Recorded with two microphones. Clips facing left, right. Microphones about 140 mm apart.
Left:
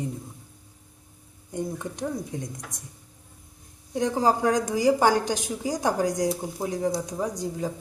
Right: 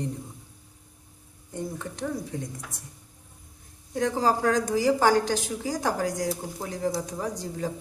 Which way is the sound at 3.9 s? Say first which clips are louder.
Left 1 dB; 20° left (ahead or behind).